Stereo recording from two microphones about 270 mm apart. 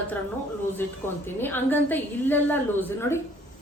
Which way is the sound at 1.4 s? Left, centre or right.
Centre.